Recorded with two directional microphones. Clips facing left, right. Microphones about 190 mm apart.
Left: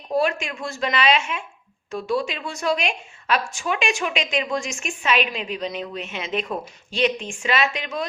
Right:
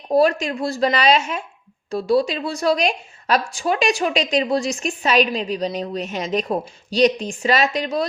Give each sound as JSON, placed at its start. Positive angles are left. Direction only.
{"t": 0.1, "sound": "a woman's voice", "side_deg": -35}